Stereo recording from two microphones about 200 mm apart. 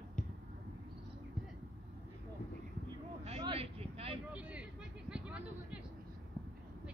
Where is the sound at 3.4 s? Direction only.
30° right (ahead or behind).